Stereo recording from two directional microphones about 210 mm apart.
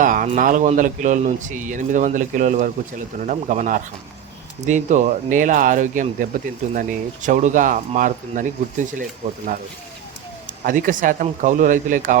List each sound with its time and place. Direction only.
0.0 s a sound: 40° right (ahead or behind)
0.3 s speech: 40° right (ahead or behind)
10.6 s speech: 40° right (ahead or behind)